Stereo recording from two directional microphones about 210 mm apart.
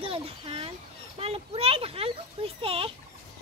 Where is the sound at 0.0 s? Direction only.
25° right (ahead or behind).